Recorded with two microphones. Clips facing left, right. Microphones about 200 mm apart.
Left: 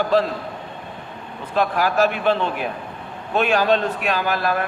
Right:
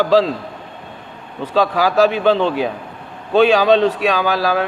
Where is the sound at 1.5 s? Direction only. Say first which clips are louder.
Right 4 dB; 90° right.